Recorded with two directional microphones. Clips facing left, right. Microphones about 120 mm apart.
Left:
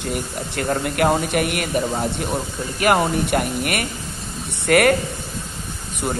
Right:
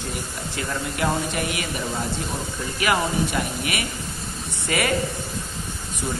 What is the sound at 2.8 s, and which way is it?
Speech, 55° left (ahead or behind).